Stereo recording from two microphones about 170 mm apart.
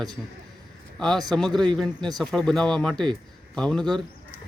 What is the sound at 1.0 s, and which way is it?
A man's voice, 5° left (ahead or behind).